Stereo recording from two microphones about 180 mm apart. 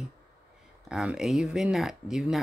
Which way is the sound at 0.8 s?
5° right (ahead or behind).